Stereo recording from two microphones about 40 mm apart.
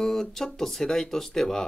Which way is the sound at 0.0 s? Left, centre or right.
Centre.